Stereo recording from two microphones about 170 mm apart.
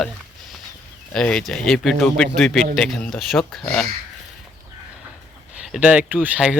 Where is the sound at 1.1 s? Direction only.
5° left (ahead or behind).